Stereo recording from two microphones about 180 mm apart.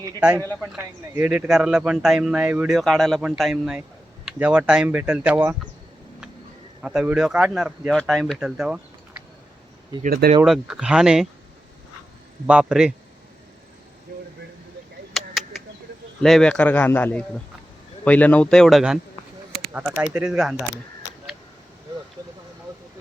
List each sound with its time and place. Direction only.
0.8 s speech: 10° right (ahead or behind)
6.8 s speech: 5° right (ahead or behind)
10.0 s speech: 50° right (ahead or behind)
10.4 s speech: centre (ahead or behind)
12.5 s speech: 5° right (ahead or behind)
15.1 s a sound: centre (ahead or behind)
16.2 s a man's voice: 5° left (ahead or behind)